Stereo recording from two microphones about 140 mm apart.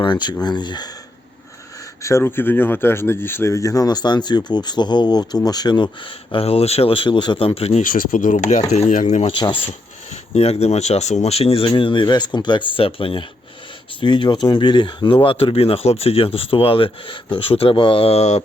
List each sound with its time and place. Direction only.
0.0 s speech: 35° left (ahead or behind)
2.0 s speech: 20° left (ahead or behind)
6.3 s speech: 45° left (ahead or behind)
7.8 s speech: 85° left; by 9.3 s 55° left (ahead or behind)
9.4 s speech: 40° left (ahead or behind)